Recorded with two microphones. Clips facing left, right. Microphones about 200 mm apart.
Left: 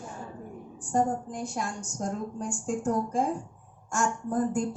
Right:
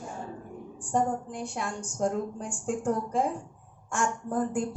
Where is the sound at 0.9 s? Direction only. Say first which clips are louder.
Left 1 dB; 45° left (ahead or behind).